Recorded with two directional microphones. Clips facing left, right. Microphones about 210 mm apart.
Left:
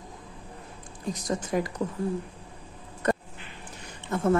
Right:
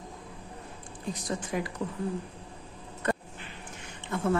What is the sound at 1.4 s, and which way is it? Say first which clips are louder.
Speech: left 6 dB; 40° left (ahead or behind).